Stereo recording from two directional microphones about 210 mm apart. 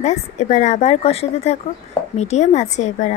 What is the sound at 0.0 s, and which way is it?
A woman's voice, 30° left (ahead or behind).